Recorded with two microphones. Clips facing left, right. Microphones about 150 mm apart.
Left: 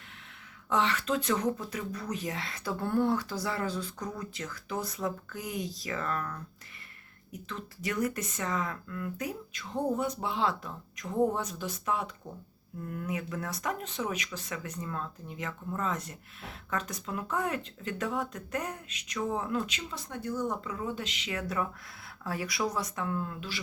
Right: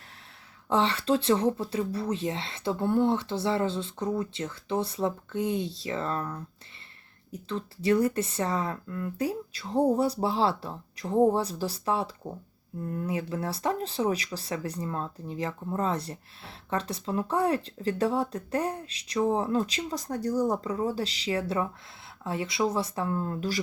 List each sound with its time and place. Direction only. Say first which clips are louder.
0.7 s speech: right 4 dB; 30° right (ahead or behind)